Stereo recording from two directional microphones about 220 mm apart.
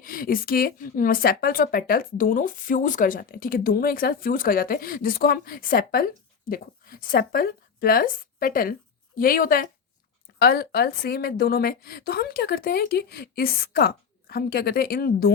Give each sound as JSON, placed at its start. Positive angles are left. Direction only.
{"t": 0.0, "sound": "a woman's voice", "side_deg": 40}